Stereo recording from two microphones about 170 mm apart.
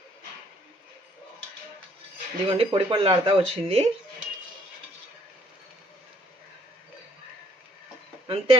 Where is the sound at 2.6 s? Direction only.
30° right (ahead or behind).